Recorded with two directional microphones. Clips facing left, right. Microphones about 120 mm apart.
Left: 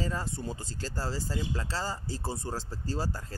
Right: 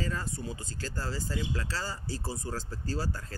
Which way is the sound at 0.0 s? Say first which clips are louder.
Left 1 dB; 25° left (ahead or behind).